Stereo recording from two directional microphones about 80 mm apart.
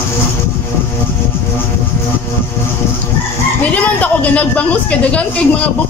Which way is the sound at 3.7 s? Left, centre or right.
Centre.